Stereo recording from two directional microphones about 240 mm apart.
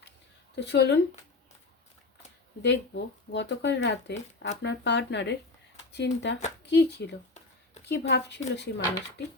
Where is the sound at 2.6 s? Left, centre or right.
Left.